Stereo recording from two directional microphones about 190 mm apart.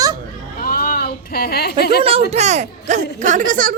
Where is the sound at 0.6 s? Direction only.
50° left (ahead or behind).